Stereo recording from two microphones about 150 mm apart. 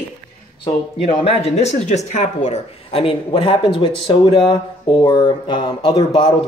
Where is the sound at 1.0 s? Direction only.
45° left (ahead or behind).